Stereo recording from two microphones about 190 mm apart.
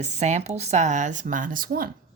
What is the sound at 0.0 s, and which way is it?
A woman's voice, 35° right (ahead or behind).